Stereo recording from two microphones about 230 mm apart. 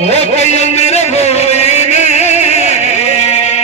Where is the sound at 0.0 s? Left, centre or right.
Left.